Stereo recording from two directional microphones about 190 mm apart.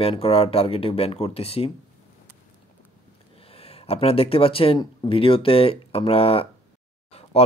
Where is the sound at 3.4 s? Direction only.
30° left (ahead or behind).